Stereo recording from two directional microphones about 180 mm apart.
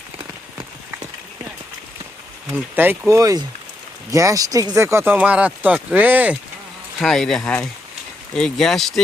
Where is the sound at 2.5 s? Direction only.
10° right (ahead or behind).